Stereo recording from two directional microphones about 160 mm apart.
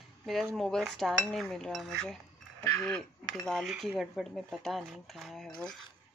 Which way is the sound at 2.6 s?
15° left (ahead or behind).